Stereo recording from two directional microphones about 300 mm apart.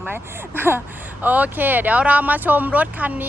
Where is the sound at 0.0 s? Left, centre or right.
Centre.